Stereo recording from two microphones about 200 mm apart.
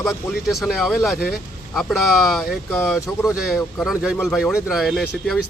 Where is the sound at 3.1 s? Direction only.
Centre (ahead or behind).